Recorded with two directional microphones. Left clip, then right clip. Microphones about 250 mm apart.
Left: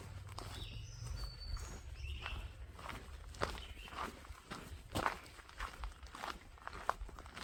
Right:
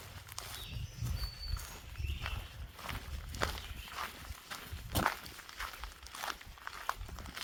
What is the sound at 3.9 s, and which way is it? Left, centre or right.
Walk, right.